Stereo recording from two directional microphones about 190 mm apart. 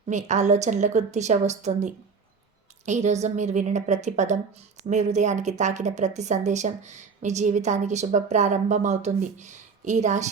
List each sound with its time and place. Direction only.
0.1 s speech: 40° right (ahead or behind)